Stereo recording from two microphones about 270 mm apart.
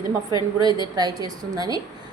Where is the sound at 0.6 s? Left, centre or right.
Centre.